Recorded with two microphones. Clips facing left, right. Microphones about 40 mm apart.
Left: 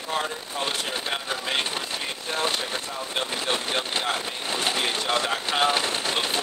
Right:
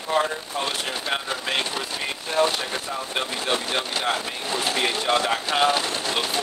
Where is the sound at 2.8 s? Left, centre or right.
Centre.